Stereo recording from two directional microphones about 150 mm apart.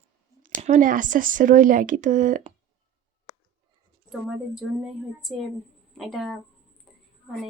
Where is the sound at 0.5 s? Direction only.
60° right (ahead or behind).